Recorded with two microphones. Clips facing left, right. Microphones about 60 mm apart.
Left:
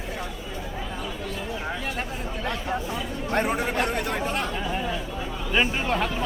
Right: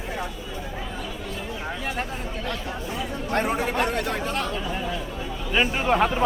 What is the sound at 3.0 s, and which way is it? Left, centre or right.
Speech, centre.